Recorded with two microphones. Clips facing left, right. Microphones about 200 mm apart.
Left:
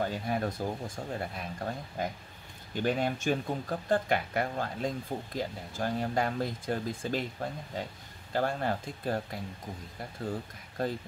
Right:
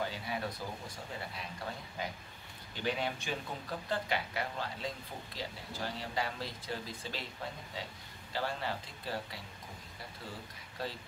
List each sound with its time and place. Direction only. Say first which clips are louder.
0.0 s speech: left 6 dB; 50° left (ahead or behind)
10.8 s speech: left 8 dB; 50° left (ahead or behind)